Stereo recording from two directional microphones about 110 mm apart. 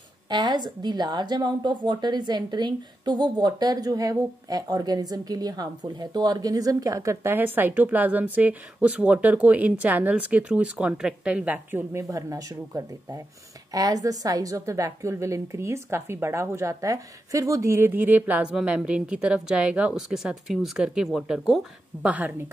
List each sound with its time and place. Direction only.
0.3 s a woman's voice: 40° right (ahead or behind); by 12.0 s 15° right (ahead or behind)
12.0 s a woman's voice: 30° right (ahead or behind); by 22.1 s 5° right (ahead or behind)